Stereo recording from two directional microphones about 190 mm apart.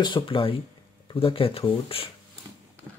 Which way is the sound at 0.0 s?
25° left (ahead or behind).